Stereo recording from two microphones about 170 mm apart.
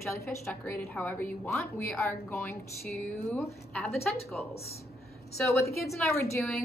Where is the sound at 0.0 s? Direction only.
15° left (ahead or behind).